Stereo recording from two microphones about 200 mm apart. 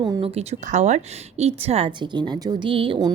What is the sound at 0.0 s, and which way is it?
Speech, 25° right (ahead or behind).